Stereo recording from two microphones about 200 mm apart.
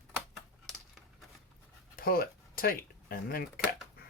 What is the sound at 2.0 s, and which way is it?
Speech, 45° left (ahead or behind).